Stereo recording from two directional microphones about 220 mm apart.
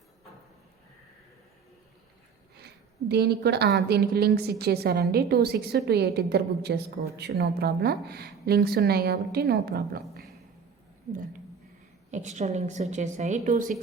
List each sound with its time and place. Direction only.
3.1 s a woman's voice: 50° right (ahead or behind)
12.1 s a woman's voice: 30° right (ahead or behind)